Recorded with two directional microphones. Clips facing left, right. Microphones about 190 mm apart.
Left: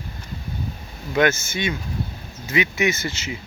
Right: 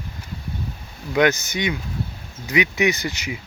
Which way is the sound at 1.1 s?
15° right (ahead or behind).